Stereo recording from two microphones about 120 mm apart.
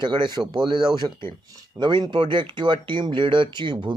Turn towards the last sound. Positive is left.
turn(degrees=-40)  # may be behind; listen again after turning